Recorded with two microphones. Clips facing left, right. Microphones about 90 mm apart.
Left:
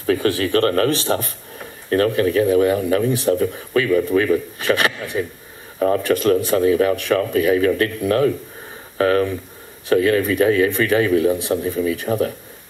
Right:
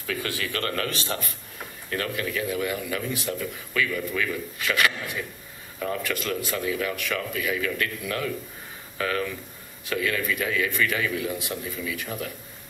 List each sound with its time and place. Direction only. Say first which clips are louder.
0.0 s speech: left 12 dB; 35° left (ahead or behind)
1.9 s speech: left 13 dB; 40° left (ahead or behind)
5.8 s speech: left 12 dB; 45° left (ahead or behind)